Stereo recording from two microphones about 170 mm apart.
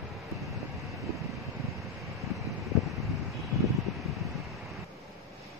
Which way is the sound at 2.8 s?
Centre (ahead or behind).